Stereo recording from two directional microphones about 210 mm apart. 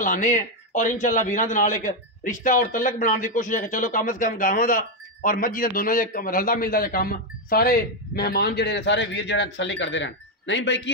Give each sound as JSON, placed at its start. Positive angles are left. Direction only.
{"t": 0.0, "sound": "a man's voice", "side_deg": 35}